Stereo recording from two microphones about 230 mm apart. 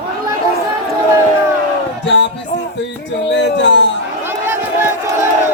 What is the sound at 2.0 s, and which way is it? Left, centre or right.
Music, left.